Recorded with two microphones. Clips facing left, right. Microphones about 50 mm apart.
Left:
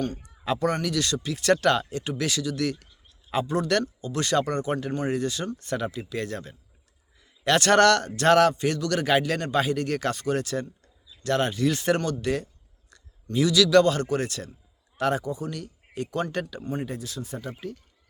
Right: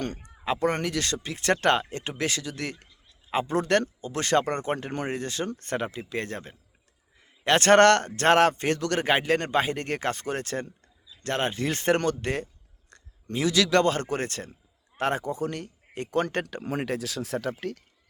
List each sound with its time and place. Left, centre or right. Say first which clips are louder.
0.3 s a man's voice: even; right
16.6 s speech: right 2 dB; right